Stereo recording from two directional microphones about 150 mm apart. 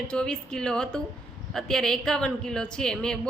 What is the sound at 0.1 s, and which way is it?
A woman's voice, 5° left (ahead or behind).